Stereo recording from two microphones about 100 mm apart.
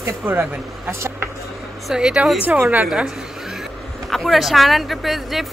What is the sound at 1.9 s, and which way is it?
Speech, 5° right (ahead or behind).